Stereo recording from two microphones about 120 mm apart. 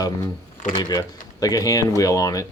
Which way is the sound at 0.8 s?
35° left (ahead or behind).